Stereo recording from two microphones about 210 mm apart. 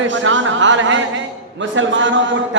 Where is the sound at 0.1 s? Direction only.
60° right (ahead or behind).